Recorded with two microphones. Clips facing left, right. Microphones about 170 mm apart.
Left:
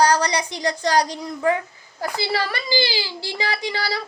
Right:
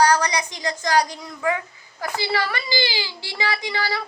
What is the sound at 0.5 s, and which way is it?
Speech, 35° left (ahead or behind).